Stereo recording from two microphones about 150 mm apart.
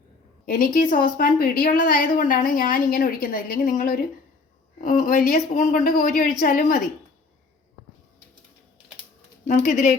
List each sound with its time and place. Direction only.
0.4 s a woman's voice: 70° left (ahead or behind)
5.6 s a woman's voice: 55° left (ahead or behind); by 6.8 s 75° left (ahead or behind)
9.6 s a woman's voice: 55° left (ahead or behind)